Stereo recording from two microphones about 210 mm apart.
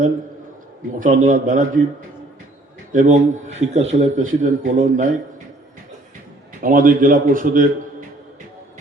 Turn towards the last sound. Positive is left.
turn(degrees=-40)  # may be behind; listen again after turning